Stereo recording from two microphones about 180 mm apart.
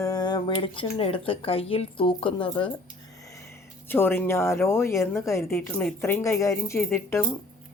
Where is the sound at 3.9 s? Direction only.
10° left (ahead or behind).